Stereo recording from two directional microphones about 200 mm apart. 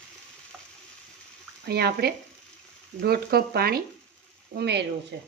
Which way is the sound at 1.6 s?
55° right (ahead or behind).